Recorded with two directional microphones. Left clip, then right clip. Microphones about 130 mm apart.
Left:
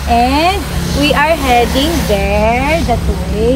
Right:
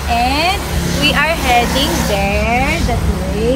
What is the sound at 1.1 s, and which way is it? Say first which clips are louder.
Speech: left 3 dB; 80° left.